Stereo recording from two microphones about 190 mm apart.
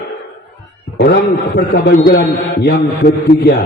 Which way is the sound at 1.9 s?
50° left (ahead or behind).